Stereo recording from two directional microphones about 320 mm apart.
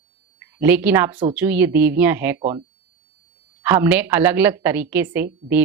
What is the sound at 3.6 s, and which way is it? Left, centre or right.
A woman's voice, centre.